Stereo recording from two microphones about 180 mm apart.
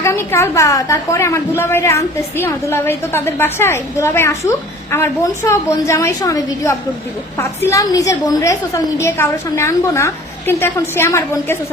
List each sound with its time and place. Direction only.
0.0 s a woman's voice: 15° left (ahead or behind)